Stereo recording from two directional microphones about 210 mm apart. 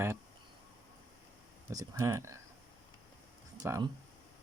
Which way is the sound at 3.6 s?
15° right (ahead or behind).